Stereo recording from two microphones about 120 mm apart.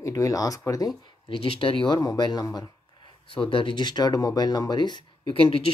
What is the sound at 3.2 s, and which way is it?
Speech, 45° left (ahead or behind).